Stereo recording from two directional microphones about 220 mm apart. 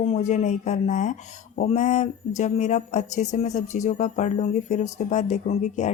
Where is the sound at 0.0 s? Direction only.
30° left (ahead or behind).